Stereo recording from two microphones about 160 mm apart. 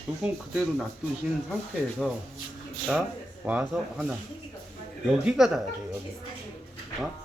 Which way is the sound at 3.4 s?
5° right (ahead or behind).